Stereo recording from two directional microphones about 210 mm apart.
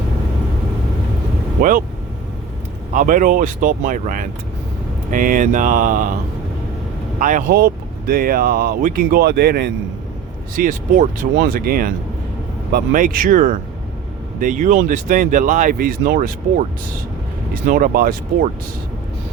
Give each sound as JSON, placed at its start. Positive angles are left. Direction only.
{"t": 2.9, "sound": "speech", "side_deg": -40}
{"t": 7.2, "sound": "speech", "side_deg": -40}
{"t": 10.5, "sound": "speech", "side_deg": -40}